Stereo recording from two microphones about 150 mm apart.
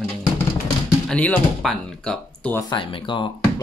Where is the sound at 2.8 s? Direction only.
35° left (ahead or behind).